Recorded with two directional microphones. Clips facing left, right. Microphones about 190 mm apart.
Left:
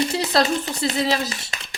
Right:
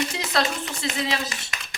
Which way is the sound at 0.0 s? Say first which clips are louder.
Left 5 dB; 35° left (ahead or behind).